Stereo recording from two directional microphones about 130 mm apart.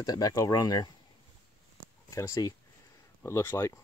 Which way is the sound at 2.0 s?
25° left (ahead or behind).